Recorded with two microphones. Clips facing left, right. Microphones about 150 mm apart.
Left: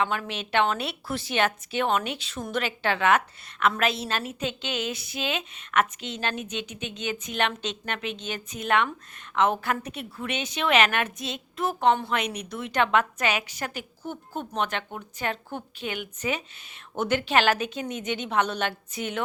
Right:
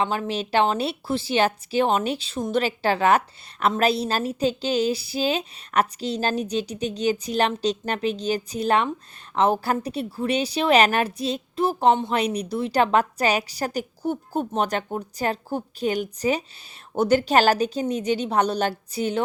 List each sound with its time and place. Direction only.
0.0 s a woman's voice: 30° right (ahead or behind)